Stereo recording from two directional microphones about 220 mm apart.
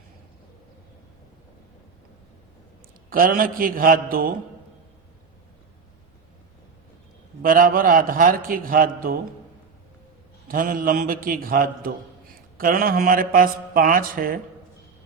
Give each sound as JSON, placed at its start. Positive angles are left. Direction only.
{"t": 3.1, "sound": "a man's voice", "side_deg": -40}
{"t": 7.4, "sound": "a man's voice", "side_deg": -40}
{"t": 10.5, "sound": "a man's voice", "side_deg": -40}